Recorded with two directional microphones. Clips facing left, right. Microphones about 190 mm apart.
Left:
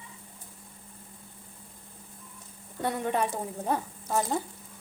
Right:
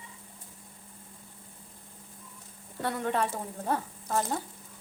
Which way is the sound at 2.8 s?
15° left (ahead or behind).